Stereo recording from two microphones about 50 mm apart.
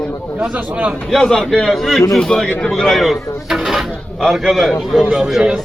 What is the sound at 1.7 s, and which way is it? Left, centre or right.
Speech, centre.